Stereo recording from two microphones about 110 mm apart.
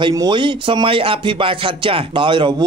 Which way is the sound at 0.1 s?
40° right (ahead or behind).